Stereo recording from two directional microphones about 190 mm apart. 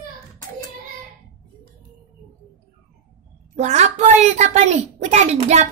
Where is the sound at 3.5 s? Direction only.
35° right (ahead or behind).